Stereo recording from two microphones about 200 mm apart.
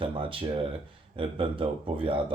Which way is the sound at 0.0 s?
25° right (ahead or behind).